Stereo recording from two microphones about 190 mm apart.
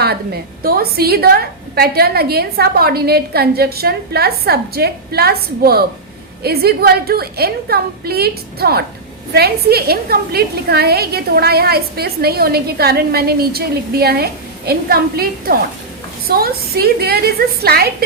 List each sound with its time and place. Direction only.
0.6 s a woman's voice: 55° right (ahead or behind)